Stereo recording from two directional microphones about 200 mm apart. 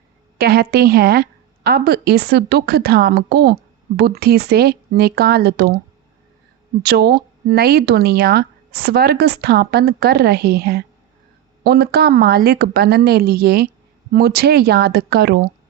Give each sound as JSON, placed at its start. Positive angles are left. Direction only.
{"t": 0.3, "sound": "a woman's voice", "side_deg": -50}
{"t": 6.8, "sound": "a woman's voice", "side_deg": -50}